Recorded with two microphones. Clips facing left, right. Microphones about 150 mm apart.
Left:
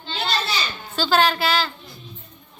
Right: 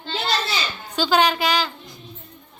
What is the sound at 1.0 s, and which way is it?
Speech, 15° right (ahead or behind).